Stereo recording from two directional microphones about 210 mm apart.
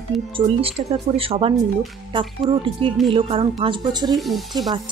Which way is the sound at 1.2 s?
25° right (ahead or behind).